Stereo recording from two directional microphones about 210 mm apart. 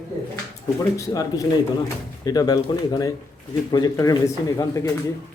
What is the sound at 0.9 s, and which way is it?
Speech, 15° left (ahead or behind).